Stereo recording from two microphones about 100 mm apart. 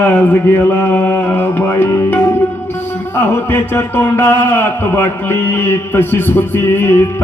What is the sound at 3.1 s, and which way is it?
A man's voice, 20° left (ahead or behind).